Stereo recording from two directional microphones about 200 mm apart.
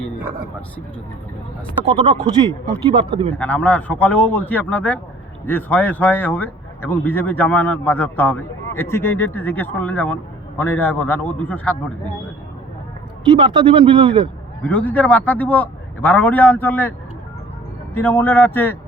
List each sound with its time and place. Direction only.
1.8 s speech: 25° right (ahead or behind)
3.3 s speech: 5° left (ahead or behind)
13.3 s speech: 25° right (ahead or behind)
14.6 s speech: 5° left (ahead or behind)
17.9 s speech: 10° left (ahead or behind)